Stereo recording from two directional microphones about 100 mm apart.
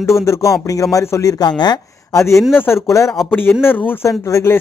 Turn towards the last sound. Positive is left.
turn(degrees=30)  # may be behind; listen again after turning